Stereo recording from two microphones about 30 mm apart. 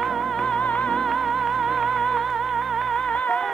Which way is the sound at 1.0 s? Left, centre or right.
Centre.